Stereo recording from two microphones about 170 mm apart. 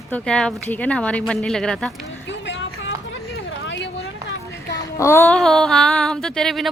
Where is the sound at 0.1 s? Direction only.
5° left (ahead or behind).